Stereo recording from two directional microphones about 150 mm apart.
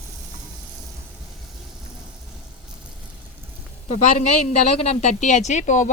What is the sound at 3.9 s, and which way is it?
Speech, 50° left (ahead or behind).